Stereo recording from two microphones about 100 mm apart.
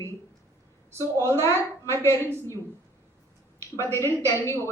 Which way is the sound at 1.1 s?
25° left (ahead or behind).